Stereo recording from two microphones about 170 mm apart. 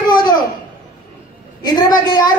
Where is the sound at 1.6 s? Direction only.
25° left (ahead or behind).